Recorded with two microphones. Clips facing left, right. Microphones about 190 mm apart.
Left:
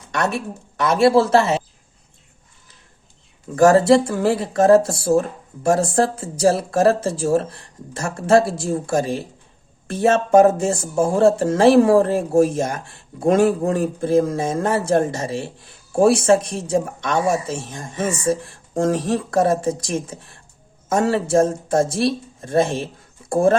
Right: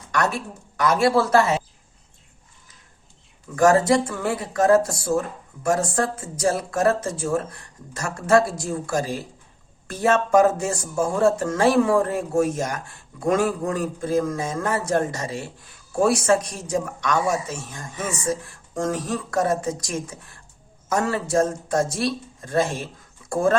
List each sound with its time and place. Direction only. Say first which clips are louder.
0.8 s speech: left 4 dB; 30° left (ahead or behind)
3.5 s speech: left 4 dB; 30° left (ahead or behind)